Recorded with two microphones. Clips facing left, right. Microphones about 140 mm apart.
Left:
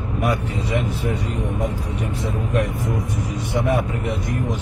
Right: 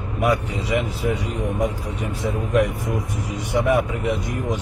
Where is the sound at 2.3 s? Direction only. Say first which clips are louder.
Right 4 dB; 15° right (ahead or behind).